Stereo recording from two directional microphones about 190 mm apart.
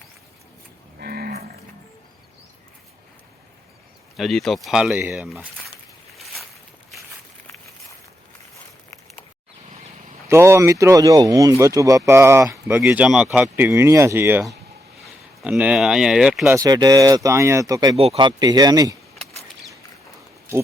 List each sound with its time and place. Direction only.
0.9 s cattle: 55° right (ahead or behind)
4.2 s speech: centre (ahead or behind)
6.1 s a sound: centre (ahead or behind)
10.2 s speech: 15° right (ahead or behind)
16.6 s speech: 20° right (ahead or behind)